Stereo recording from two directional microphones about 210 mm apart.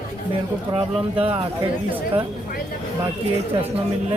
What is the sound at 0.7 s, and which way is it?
Speech, 15° right (ahead or behind).